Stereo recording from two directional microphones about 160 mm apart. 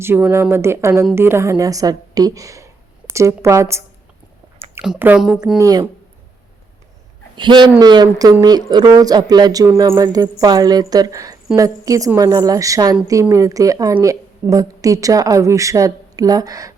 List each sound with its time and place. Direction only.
0.0 s a woman's voice: 15° right (ahead or behind)
5.5 s a woman's voice: 20° right (ahead or behind)
7.3 s a woman's voice: 30° right (ahead or behind)